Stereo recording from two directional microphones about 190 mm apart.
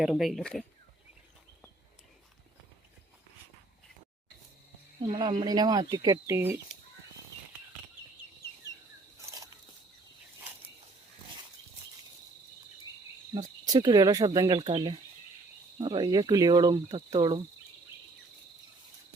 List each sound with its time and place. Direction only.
0.0 s speech: centre (ahead or behind)
5.0 s speech: 25° right (ahead or behind)
9.2 s a sound: 20° right (ahead or behind)
13.3 s speech: 20° right (ahead or behind)